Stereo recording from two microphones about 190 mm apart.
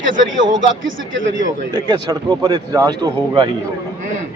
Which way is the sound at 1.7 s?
25° right (ahead or behind).